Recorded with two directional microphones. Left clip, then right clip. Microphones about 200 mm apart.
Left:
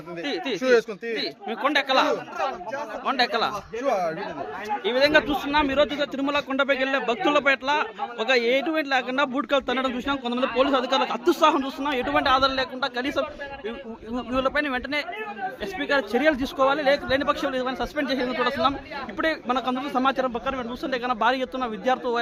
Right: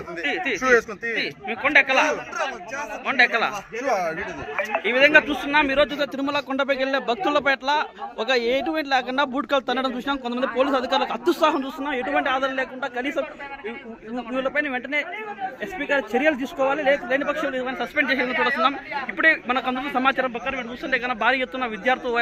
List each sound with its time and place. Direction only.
0.2 s a man's voice: 10° left (ahead or behind)
0.6 s speech: 45° left (ahead or behind)
1.2 s a man's voice: 15° left (ahead or behind)
3.1 s a man's voice: 15° left (ahead or behind)
11.8 s a man's voice: 10° left (ahead or behind)
12.8 s a man's voice: centre (ahead or behind)
20.4 s a man's voice: 20° left (ahead or behind)